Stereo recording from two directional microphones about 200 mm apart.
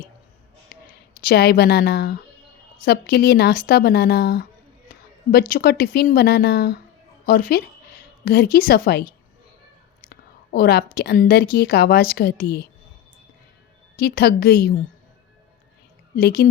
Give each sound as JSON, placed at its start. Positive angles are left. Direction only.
{"t": 0.7, "sound": "a sound", "side_deg": 50}
{"t": 1.2, "sound": "a woman's voice", "side_deg": 50}
{"t": 10.1, "sound": "whispering", "side_deg": 50}
{"t": 10.9, "sound": "a woman's voice", "side_deg": 50}
{"t": 13.9, "sound": "a woman's voice", "side_deg": 50}
{"t": 16.1, "sound": "a woman's voice", "side_deg": 50}